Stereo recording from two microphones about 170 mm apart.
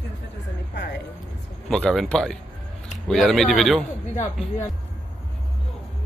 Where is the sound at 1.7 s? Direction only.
5° left (ahead or behind).